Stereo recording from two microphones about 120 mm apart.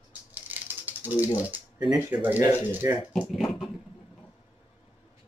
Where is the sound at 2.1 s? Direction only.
15° right (ahead or behind).